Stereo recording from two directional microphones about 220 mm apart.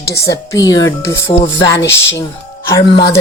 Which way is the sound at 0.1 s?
15° left (ahead or behind).